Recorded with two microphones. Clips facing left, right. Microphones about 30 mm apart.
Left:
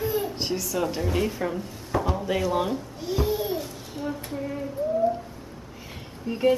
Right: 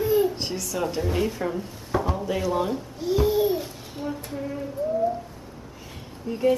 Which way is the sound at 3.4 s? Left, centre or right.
Centre.